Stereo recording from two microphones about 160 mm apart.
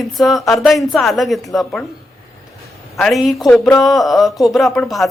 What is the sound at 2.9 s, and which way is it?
Speech, centre (ahead or behind).